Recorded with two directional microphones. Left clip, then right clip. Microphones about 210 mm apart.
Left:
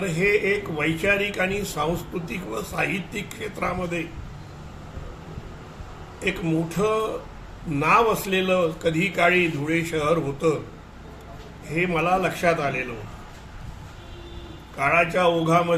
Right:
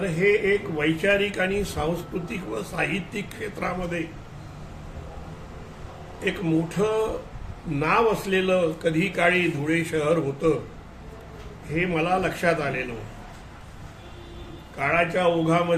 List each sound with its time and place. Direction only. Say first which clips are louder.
0.0 s a man's voice: even; centre (ahead or behind)
6.2 s a man's voice: even; centre (ahead or behind)
11.7 s a man's voice: left 2 dB; centre (ahead or behind)
14.8 s a man's voice: left 2 dB; centre (ahead or behind)